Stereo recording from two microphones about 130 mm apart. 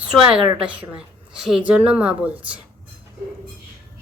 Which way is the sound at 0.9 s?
5° right (ahead or behind).